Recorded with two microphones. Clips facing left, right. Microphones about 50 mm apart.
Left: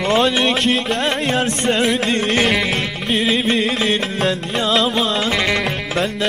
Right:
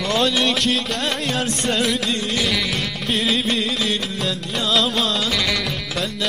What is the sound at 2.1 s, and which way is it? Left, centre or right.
Music, left.